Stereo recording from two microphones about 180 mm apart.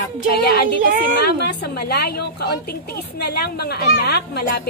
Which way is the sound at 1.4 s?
65° left (ahead or behind).